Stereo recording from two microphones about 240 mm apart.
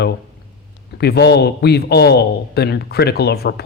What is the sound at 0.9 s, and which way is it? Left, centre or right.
Speech, left.